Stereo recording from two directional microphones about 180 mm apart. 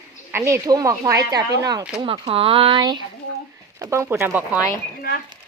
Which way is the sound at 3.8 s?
15° right (ahead or behind).